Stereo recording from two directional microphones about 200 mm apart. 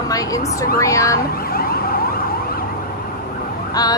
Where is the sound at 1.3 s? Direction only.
50° left (ahead or behind).